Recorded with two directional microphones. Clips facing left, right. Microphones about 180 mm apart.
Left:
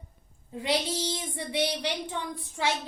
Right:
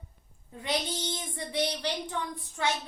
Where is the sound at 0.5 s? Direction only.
25° left (ahead or behind).